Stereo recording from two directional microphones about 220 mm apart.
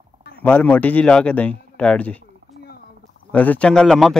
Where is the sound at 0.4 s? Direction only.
5° left (ahead or behind).